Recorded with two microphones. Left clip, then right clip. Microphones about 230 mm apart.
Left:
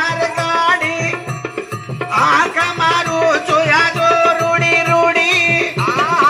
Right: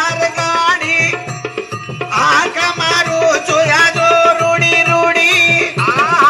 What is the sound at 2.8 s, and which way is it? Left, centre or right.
Music, right.